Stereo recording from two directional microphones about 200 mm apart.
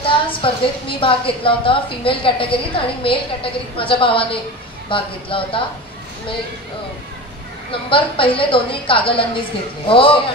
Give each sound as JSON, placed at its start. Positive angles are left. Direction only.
{"t": 0.0, "sound": "a woman's voice", "side_deg": 25}
{"t": 7.7, "sound": "a woman's voice", "side_deg": 25}